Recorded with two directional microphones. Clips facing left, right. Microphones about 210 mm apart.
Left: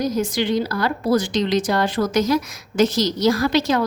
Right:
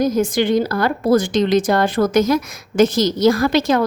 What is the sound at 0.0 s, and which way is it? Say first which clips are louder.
A woman's voice: right 5 dB; 50° right (ahead or behind).